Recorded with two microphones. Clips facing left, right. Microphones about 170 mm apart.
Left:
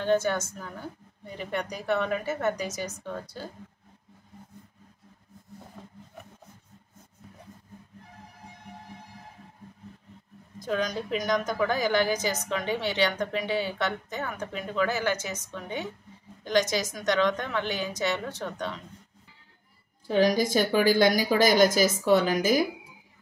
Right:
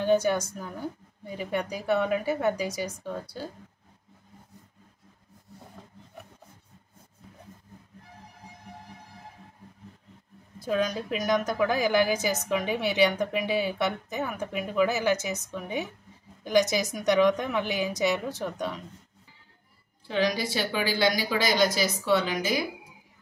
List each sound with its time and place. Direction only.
0.0 s a woman's voice: 10° right (ahead or behind)
10.6 s a woman's voice: 5° right (ahead or behind)
20.1 s a woman's voice: 45° left (ahead or behind)